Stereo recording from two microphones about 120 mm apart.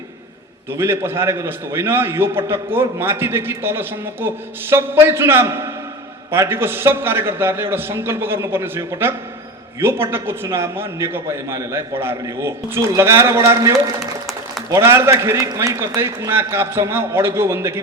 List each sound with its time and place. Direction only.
0.8 s a man's voice: 20° right (ahead or behind)